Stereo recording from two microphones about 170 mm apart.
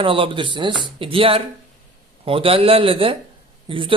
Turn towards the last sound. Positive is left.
turn(degrees=-30)  # may be behind; listen again after turning